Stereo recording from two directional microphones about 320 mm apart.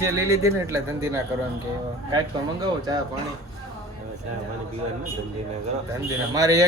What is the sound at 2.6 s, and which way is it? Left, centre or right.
Speech, centre.